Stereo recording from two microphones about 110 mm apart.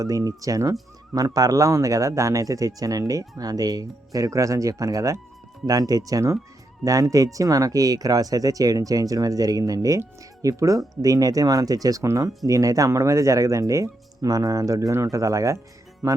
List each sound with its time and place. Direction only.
0.0 s speech: 30° right (ahead or behind)